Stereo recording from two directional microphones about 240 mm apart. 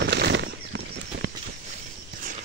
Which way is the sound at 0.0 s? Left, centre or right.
Right.